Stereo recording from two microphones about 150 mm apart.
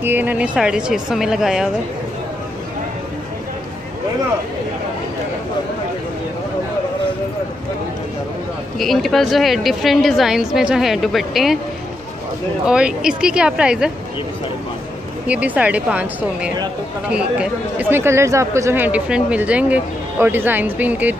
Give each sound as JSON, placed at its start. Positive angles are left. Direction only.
{"t": 0.0, "sound": "a woman's voice", "side_deg": -10}
{"t": 8.7, "sound": "a woman's voice", "side_deg": 0}
{"t": 12.6, "sound": "speech", "side_deg": -5}
{"t": 15.2, "sound": "speech", "side_deg": -10}